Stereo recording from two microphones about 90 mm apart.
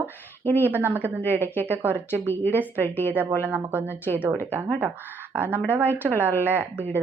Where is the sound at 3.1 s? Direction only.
20° right (ahead or behind).